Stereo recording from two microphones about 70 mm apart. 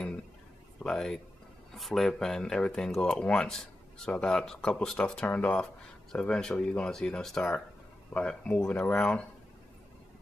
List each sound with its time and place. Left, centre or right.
0.8 s speech: centre